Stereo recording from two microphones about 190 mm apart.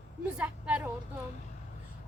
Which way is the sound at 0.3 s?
5° right (ahead or behind).